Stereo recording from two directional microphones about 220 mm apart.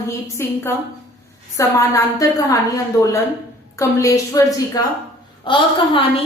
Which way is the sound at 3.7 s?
15° left (ahead or behind).